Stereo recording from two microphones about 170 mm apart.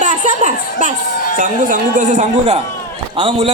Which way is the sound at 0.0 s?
50° right (ahead or behind).